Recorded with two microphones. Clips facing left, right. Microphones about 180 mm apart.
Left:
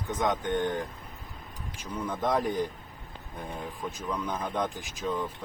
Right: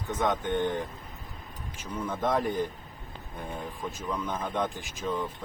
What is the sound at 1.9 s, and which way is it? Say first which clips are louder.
Speech: even; centre (ahead or behind).